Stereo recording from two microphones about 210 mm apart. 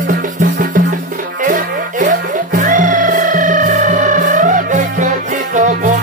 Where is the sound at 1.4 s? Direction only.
40° right (ahead or behind).